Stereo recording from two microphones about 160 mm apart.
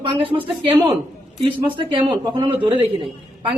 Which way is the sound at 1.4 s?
30° right (ahead or behind).